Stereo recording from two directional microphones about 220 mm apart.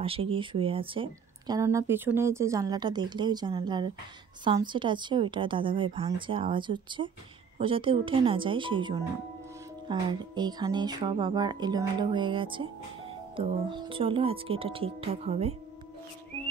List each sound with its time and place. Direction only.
0.0 s a woman's voice: 25° right (ahead or behind)